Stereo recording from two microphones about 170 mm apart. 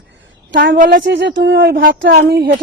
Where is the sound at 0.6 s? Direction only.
55° right (ahead or behind).